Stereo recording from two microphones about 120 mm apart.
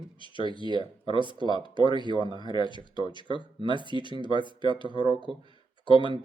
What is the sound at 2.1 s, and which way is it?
Speech, 45° left (ahead or behind).